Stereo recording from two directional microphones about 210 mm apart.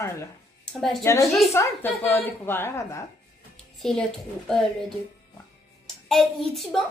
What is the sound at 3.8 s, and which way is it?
Speech, centre (ahead or behind).